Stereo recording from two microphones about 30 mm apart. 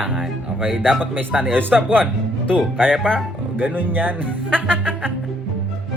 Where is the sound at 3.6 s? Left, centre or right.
Right.